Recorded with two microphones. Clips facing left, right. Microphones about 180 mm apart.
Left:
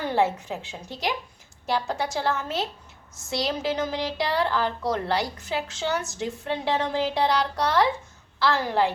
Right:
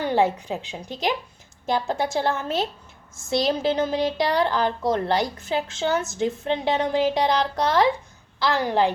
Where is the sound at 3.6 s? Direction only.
30° right (ahead or behind).